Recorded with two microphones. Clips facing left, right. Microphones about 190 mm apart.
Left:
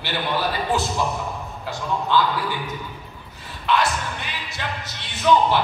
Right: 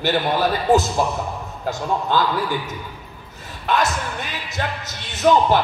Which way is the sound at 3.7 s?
45° right (ahead or behind).